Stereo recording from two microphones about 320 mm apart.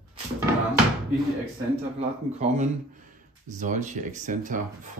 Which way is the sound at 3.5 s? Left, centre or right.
Right.